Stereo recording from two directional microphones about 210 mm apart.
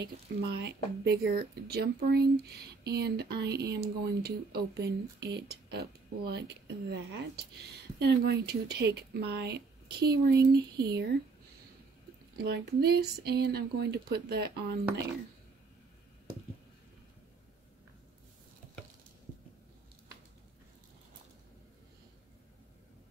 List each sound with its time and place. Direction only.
0.0 s speech: 50° right (ahead or behind)
12.4 s speech: 50° right (ahead or behind)